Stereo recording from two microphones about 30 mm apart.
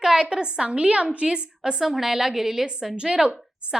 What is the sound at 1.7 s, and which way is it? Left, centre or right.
Speech, centre.